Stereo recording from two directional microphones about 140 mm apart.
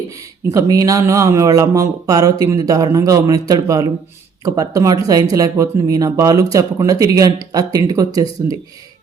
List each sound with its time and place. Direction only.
0.1 s speech: 25° right (ahead or behind)